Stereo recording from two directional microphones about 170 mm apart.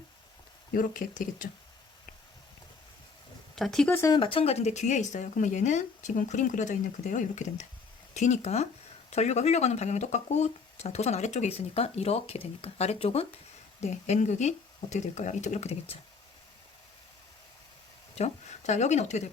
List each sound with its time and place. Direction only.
0.7 s speech: 55° left (ahead or behind)
3.5 s speech: centre (ahead or behind)
4.1 s speech: 30° left (ahead or behind)
18.1 s speech: 40° left (ahead or behind)